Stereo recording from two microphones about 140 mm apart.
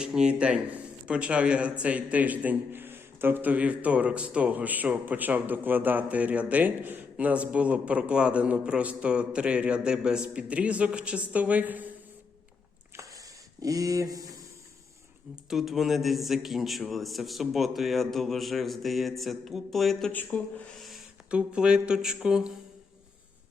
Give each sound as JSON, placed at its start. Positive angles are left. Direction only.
{"t": 0.0, "sound": "a man's voice", "side_deg": -5}
{"t": 13.6, "sound": "speech", "side_deg": -25}
{"t": 15.4, "sound": "a man's voice", "side_deg": 0}